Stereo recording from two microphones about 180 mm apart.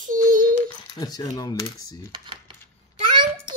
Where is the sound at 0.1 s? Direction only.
45° right (ahead or behind).